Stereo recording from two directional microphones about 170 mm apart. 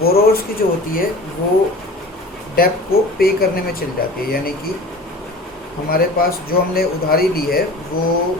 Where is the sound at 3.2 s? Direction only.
60° left (ahead or behind).